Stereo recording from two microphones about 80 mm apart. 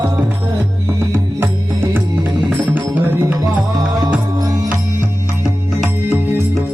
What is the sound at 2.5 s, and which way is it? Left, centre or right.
Music, right.